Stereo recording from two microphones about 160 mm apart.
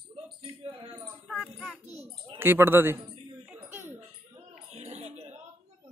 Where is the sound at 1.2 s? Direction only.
5° right (ahead or behind).